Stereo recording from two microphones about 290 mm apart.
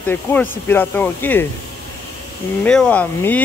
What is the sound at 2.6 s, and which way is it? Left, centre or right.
Speech, centre.